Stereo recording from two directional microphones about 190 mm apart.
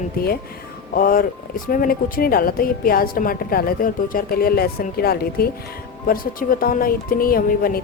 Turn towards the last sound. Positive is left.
turn(degrees=50)  # may be behind; listen again after turning